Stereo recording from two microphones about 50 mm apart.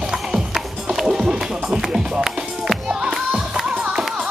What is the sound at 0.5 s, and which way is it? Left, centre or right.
Music, centre.